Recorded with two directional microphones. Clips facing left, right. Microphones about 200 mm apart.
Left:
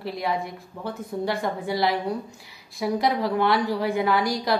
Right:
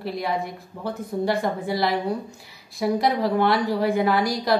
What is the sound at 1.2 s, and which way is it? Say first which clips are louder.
A woman's voice: right 3 dB; 45° right (ahead or behind).